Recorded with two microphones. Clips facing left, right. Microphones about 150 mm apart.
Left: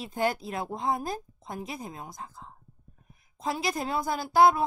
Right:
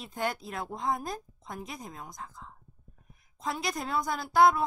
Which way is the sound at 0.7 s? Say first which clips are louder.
Left 2 dB; 25° left (ahead or behind).